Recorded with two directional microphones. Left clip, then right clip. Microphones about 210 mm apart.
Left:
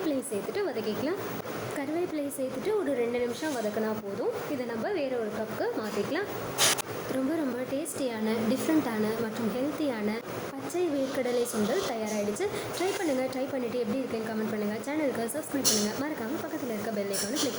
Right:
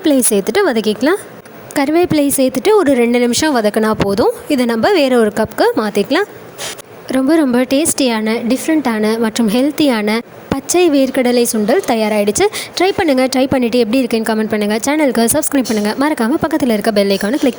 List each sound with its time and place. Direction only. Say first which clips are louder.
0.1 s a woman's voice: right 18 dB; 55° right (ahead or behind)